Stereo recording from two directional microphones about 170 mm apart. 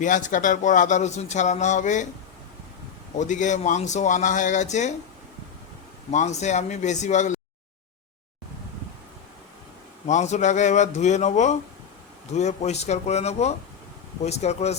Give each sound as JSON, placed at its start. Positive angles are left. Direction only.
{"t": 0.0, "sound": "speech", "side_deg": 50}
{"t": 3.2, "sound": "speech", "side_deg": 45}
{"t": 6.1, "sound": "speech", "side_deg": 45}
{"t": 10.1, "sound": "speech", "side_deg": 45}